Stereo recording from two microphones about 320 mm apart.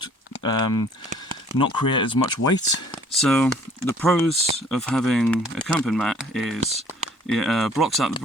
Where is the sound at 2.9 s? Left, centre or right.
Centre.